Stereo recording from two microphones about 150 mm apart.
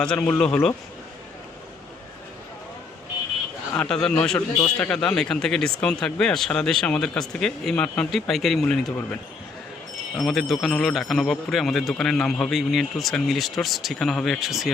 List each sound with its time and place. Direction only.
0.0 s speech: 10° left (ahead or behind)
3.8 s speech: 5° left (ahead or behind)
10.2 s speech: centre (ahead or behind)